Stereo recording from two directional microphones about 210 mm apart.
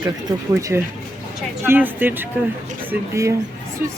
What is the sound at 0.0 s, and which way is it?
Speech, 15° right (ahead or behind).